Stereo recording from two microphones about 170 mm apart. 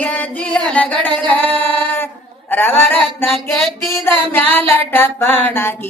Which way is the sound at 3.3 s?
Centre (ahead or behind).